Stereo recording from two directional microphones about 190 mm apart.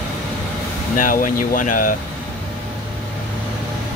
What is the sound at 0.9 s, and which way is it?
Speech, 45° left (ahead or behind).